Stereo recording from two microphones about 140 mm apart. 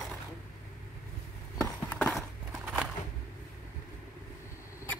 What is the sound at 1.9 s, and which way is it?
Clip-clop, centre (ahead or behind).